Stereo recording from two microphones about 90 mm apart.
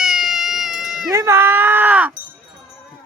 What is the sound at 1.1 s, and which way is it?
Speech, 30° right (ahead or behind).